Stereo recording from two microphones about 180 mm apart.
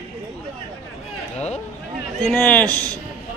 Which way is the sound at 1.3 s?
40° left (ahead or behind).